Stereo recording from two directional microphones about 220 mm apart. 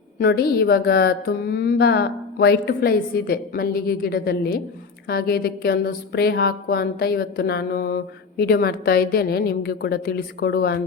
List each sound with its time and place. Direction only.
0.2 s a woman's voice: 45° left (ahead or behind)